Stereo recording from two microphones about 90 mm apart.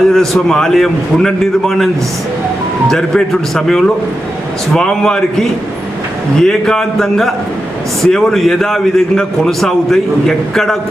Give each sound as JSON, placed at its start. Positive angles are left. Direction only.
{"t": 0.1, "sound": "a man's voice", "side_deg": 5}
{"t": 2.9, "sound": "a man's voice", "side_deg": 5}